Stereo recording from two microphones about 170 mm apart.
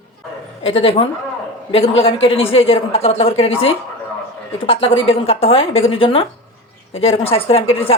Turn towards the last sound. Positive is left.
turn(degrees=35)  # may be behind; listen again after turning